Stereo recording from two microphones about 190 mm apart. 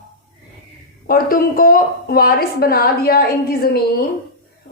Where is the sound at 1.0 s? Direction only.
50° left (ahead or behind).